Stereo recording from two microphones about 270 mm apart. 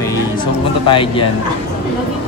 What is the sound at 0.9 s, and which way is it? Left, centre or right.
Speech, centre.